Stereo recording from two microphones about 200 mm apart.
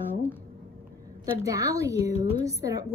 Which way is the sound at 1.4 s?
15° right (ahead or behind).